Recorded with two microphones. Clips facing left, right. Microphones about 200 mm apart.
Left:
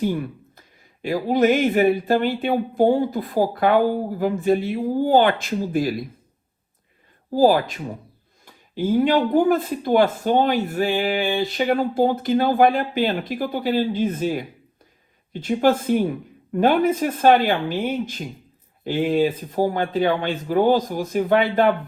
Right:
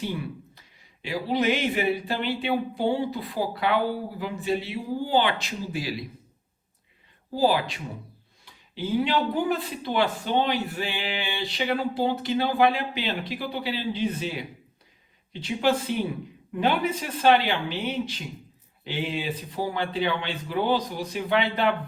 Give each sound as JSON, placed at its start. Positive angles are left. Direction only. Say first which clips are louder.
{"t": 0.0, "sound": "speech", "louder": "left 8 dB", "side_deg": 50}
{"t": 7.3, "sound": "speech", "louder": "left 7 dB", "side_deg": 45}